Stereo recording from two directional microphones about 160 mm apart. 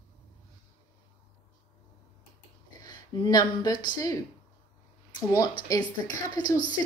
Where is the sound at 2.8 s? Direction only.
25° left (ahead or behind).